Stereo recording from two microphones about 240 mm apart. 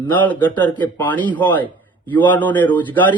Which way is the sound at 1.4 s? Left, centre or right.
Centre.